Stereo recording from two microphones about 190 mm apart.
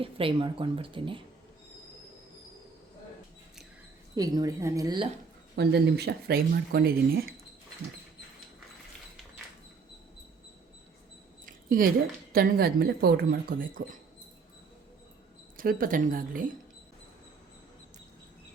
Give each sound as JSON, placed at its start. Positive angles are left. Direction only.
{"t": 0.0, "sound": "speech", "side_deg": -30}
{"t": 4.1, "sound": "speech", "side_deg": -20}
{"t": 5.5, "sound": "speech", "side_deg": -60}
{"t": 11.4, "sound": "a sound", "side_deg": -45}
{"t": 12.3, "sound": "speech", "side_deg": -55}
{"t": 15.5, "sound": "speech", "side_deg": -50}